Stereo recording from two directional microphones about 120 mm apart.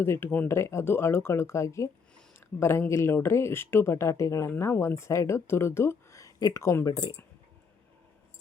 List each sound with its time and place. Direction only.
0.0 s speech: 20° left (ahead or behind)